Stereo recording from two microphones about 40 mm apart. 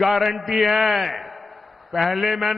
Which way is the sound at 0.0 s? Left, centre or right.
Centre.